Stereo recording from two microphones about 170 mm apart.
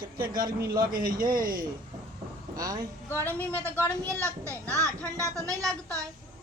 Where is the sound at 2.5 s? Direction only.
20° right (ahead or behind).